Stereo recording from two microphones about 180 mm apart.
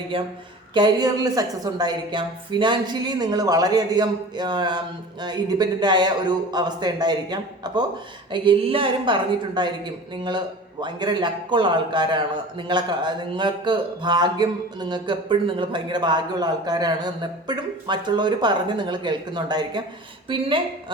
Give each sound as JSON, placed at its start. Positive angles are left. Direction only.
{"t": 0.1, "sound": "speech", "side_deg": -30}